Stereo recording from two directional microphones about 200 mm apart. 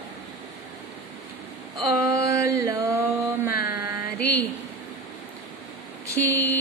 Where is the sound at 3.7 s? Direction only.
10° right (ahead or behind).